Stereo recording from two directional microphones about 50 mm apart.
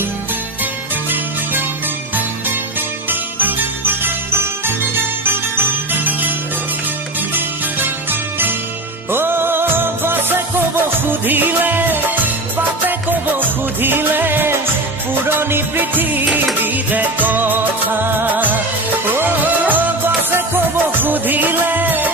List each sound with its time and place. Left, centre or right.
3.1 s jingle bell: right
7.3 s music: right
13.8 s music of bollywood: right
15.3 s music: right